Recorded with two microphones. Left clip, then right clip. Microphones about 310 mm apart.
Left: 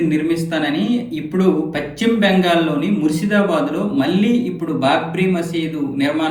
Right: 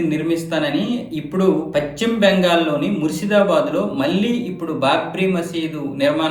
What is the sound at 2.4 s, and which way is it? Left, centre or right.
Speech, centre.